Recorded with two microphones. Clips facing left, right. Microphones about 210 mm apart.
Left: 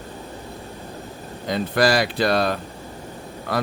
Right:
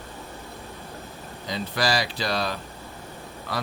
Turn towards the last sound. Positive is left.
turn(degrees=55)  # may be behind; listen again after turning